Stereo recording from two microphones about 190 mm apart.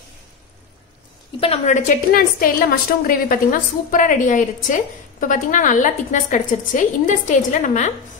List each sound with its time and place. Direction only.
1.4 s a woman's voice: 35° left (ahead or behind)